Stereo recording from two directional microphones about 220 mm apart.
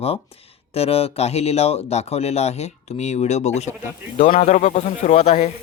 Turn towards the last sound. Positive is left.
turn(degrees=30)  # may be behind; listen again after turning